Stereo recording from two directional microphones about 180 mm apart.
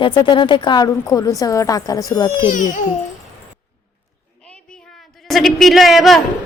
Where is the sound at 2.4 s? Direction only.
45° left (ahead or behind).